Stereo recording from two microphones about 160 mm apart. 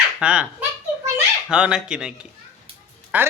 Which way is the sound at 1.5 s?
5° right (ahead or behind).